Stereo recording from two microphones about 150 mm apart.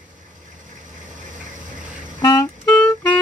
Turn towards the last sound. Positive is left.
turn(degrees=10)  # may be behind; listen again after turning